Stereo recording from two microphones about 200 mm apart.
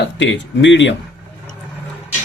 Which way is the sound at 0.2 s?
65° left (ahead or behind).